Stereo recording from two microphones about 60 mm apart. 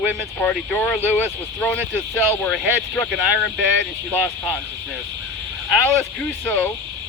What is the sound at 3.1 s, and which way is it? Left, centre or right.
Speech, centre.